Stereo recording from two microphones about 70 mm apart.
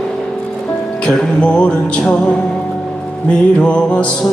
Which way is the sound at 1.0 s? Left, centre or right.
Centre.